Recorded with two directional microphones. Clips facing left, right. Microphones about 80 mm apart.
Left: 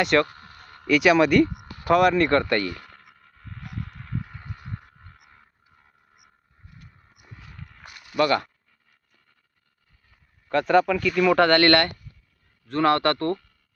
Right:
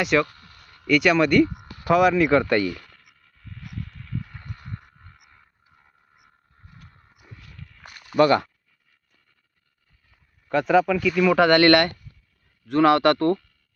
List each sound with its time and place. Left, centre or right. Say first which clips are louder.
0.0 s speech: left 1 dB; centre
0.3 s a sound: left 4 dB; left
0.9 s speech: left 1 dB; centre
2.8 s a sound: left 4 dB; left
4.2 s a sound: even; centre
7.3 s walk: left 2 dB; left
8.2 s speech: right 4 dB; right
10.5 s speech: even; centre
11.3 s speech: right 4 dB; centre